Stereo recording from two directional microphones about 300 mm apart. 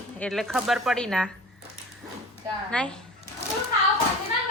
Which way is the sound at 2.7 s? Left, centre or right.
Centre.